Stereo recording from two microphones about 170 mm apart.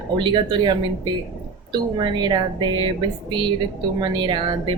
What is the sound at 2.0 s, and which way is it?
Speech, 25° right (ahead or behind).